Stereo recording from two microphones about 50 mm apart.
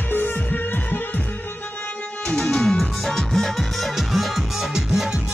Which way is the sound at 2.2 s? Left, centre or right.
Centre.